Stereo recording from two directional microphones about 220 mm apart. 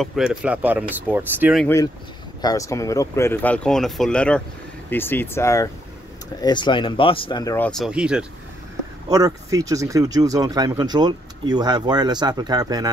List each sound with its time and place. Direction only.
0.0 s speech: centre (ahead or behind)
1.6 s speech: 10° left (ahead or behind)
7.5 s speech: 5° left (ahead or behind)
9.1 s speech: 15° right (ahead or behind)